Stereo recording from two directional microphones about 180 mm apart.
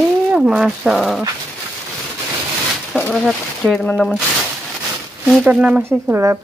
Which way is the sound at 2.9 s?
5° left (ahead or behind).